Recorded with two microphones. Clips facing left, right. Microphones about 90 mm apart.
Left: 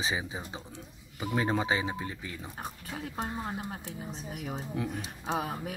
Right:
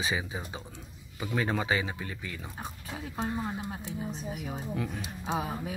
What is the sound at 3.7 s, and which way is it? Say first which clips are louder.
Speech: right 3 dB; 5° right (ahead or behind).